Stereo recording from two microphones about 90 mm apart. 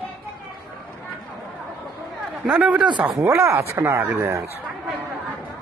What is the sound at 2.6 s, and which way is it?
Speech, 15° right (ahead or behind).